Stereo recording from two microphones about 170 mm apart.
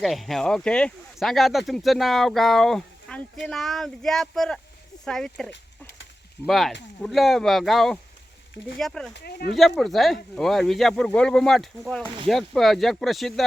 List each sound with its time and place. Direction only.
0.0 s speech: centre (ahead or behind)
9.1 s speech: 70° left (ahead or behind)
9.6 s speech: centre (ahead or behind)